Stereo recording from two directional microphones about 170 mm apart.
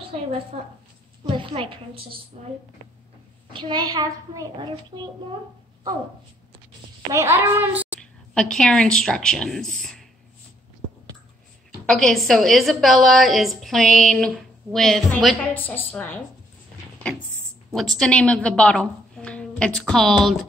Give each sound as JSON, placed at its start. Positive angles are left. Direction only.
{"t": 0.5, "sound": "a woman's voice", "side_deg": -35}
{"t": 3.5, "sound": "a woman's voice", "side_deg": -25}
{"t": 7.1, "sound": "a child's voice", "side_deg": -15}
{"t": 8.0, "sound": "speech", "side_deg": 5}
{"t": 11.8, "sound": "a woman's voice", "side_deg": 5}
{"t": 17.9, "sound": "a woman's voice", "side_deg": 5}